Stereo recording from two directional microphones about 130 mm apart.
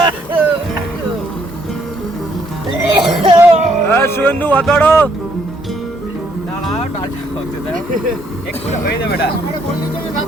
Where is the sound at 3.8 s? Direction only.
20° left (ahead or behind).